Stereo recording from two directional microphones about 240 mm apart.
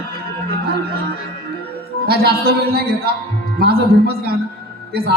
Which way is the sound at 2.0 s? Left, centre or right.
Right.